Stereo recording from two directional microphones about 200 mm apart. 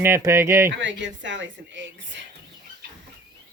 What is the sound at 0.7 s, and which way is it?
A woman's voice, 65° right (ahead or behind).